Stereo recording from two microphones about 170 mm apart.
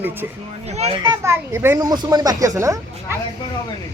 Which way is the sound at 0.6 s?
40° right (ahead or behind).